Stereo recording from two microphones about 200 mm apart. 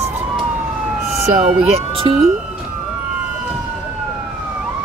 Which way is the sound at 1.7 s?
30° right (ahead or behind).